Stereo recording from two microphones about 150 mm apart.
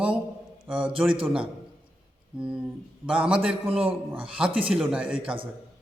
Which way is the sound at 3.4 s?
40° right (ahead or behind).